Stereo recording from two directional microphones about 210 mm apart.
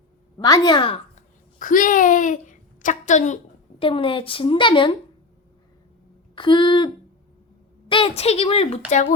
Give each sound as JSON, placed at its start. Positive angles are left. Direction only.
{"t": 0.3, "sound": "a woman's voice", "side_deg": 15}
{"t": 1.5, "sound": "a woman's voice", "side_deg": 40}
{"t": 6.3, "sound": "a woman's voice", "side_deg": 20}